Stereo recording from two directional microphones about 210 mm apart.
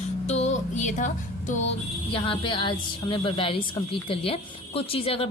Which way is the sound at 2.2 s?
25° left (ahead or behind).